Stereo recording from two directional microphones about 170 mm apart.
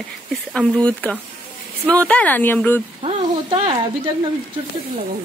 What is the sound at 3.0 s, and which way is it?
Speech, 35° right (ahead or behind).